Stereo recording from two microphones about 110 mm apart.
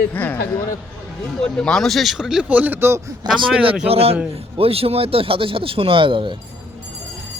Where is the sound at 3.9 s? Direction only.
65° right (ahead or behind).